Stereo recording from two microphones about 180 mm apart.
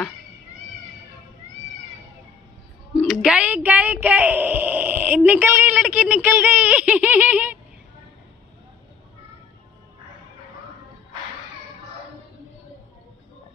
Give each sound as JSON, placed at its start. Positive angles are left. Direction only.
{"t": 2.9, "sound": "speech", "side_deg": -5}